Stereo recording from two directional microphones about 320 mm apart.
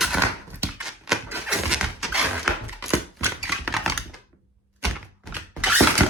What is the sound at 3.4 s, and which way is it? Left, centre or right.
Typewriter, centre.